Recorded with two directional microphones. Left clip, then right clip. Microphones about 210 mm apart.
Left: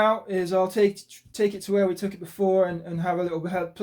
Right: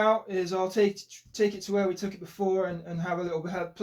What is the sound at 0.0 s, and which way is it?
Speech, 50° left (ahead or behind).